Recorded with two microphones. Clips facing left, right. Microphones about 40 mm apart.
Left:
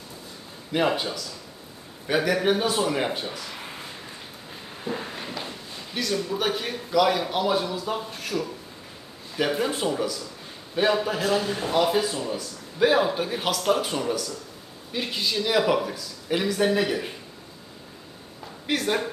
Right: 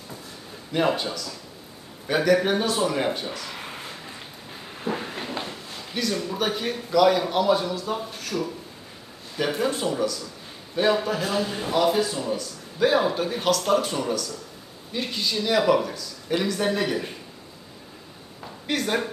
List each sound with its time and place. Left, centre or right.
0.7 s speech: centre
4.9 s a sound: right
5.9 s a man's voice: centre
9.4 s speech: centre
18.7 s a man's voice: centre